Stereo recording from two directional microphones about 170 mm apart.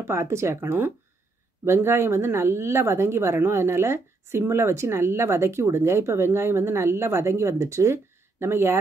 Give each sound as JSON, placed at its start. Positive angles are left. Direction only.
{"t": 0.0, "sound": "speech", "side_deg": -15}